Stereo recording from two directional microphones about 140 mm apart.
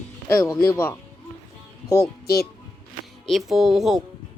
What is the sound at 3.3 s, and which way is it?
Speech, centre (ahead or behind).